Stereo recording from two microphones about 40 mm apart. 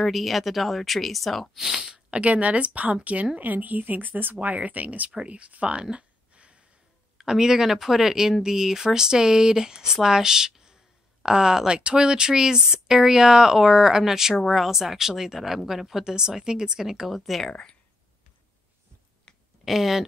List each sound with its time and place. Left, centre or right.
0.0 s speech: centre
1.6 s speech: centre
2.0 s a woman's voice: right
4.4 s a woman's voice: right
5.2 s a sound: right
7.2 s speech: centre
17.5 s speech: left
19.3 s a sound: centre
19.6 s speech: centre